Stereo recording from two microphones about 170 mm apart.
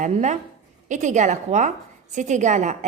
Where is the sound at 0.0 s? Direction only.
45° right (ahead or behind).